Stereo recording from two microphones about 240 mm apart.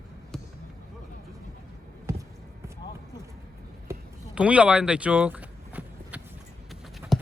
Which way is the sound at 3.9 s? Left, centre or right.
Centre.